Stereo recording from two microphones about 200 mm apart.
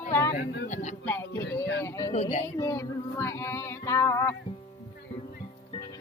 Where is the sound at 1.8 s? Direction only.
15° left (ahead or behind).